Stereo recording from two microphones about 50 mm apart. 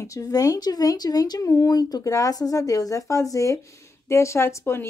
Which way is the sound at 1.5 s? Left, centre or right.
Left.